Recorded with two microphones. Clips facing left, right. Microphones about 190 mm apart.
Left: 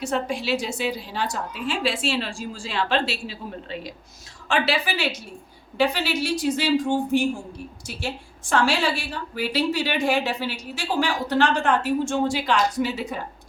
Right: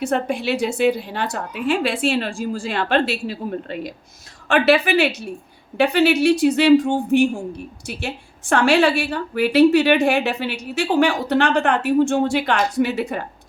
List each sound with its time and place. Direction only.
0.0 s a woman's voice: 60° right (ahead or behind)